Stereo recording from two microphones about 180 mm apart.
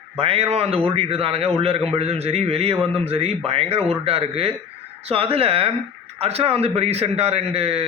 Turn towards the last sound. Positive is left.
turn(degrees=-35)  # may be behind; listen again after turning